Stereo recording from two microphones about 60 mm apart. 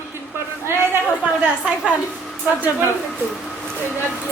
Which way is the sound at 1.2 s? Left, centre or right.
Centre.